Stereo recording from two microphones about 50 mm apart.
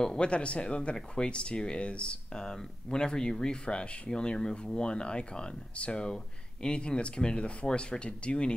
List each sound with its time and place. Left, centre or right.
0.0 s speech: centre